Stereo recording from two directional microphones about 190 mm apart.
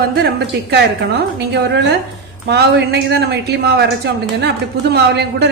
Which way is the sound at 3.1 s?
60° right (ahead or behind).